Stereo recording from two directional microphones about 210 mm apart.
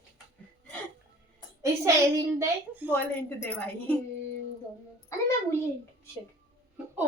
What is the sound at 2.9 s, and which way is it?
A woman's voice, 10° left (ahead or behind).